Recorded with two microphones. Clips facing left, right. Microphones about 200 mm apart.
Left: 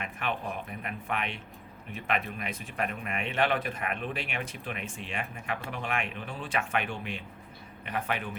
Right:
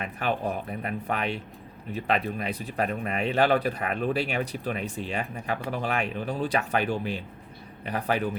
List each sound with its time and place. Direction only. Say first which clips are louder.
0.0 s speech: right 6 dB; 35° right (ahead or behind)